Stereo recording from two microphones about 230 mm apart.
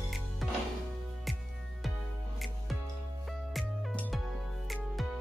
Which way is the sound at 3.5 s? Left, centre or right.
Centre.